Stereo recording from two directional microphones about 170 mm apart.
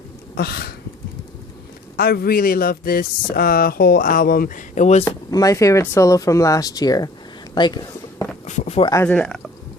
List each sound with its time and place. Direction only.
0.3 s speech: 65° left (ahead or behind)
2.0 s speech: 65° left (ahead or behind); by 5.0 s 45° left (ahead or behind)
5.0 s speech: 20° left (ahead or behind)
8.4 s speech: 40° left (ahead or behind)
8.8 s speech: 20° left (ahead or behind)
9.0 s speech: 5° left (ahead or behind)